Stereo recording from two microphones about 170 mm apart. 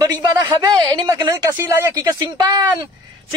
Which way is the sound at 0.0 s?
20° right (ahead or behind).